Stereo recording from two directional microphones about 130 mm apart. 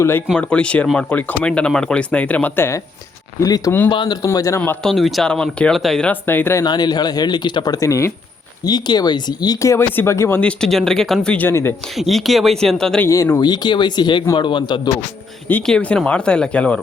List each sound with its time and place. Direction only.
0.3 s speech: 10° left (ahead or behind); by 3.7 s 25° left (ahead or behind)
3.8 s speech: 40° left (ahead or behind)
4.3 s speech: 25° left (ahead or behind)
4.8 s speech: centre (ahead or behind)
6.2 s speech: 15° left (ahead or behind)
6.7 s speech: 35° left (ahead or behind)
10.4 s speech: 5° left (ahead or behind)
11.9 s speech: centre (ahead or behind)
13.1 s speech: 20° left (ahead or behind)
15.6 s speech: 10° left (ahead or behind)